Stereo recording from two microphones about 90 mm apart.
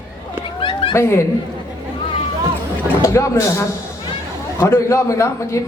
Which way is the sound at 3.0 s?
35° left (ahead or behind).